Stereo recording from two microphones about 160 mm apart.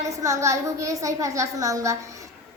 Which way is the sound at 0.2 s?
20° right (ahead or behind).